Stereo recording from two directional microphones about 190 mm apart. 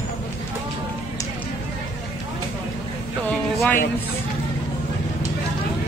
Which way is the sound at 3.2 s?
10° left (ahead or behind).